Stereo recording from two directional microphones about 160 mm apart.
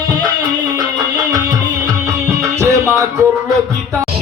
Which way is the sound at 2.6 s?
20° right (ahead or behind).